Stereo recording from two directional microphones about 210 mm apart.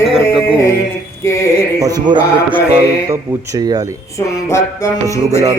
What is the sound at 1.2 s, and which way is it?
Music, 15° left (ahead or behind).